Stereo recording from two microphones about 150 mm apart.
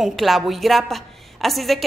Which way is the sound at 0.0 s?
Centre (ahead or behind).